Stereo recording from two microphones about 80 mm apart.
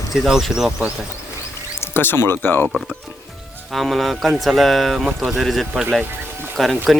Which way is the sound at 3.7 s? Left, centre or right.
Centre.